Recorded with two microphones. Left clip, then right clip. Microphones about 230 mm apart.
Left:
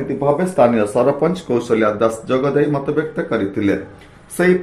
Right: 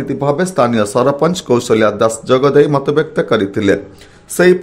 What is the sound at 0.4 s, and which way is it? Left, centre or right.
Speech, right.